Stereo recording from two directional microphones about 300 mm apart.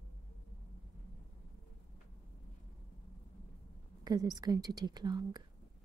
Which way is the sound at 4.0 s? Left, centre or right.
Centre.